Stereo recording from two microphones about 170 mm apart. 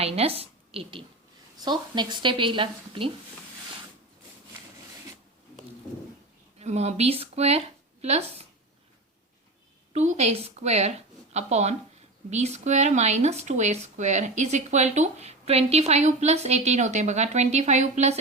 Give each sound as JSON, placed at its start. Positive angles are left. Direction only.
{"t": 0.0, "sound": "a woman's voice", "side_deg": -35}
{"t": 6.6, "sound": "speech", "side_deg": -40}
{"t": 9.9, "sound": "speech", "side_deg": -40}